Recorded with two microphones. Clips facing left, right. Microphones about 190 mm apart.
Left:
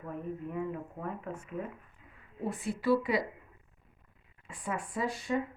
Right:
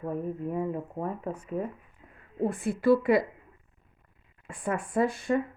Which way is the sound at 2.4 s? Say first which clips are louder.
Right 7 dB; 50° right (ahead or behind).